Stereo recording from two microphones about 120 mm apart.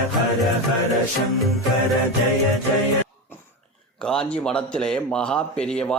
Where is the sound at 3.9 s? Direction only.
5° left (ahead or behind).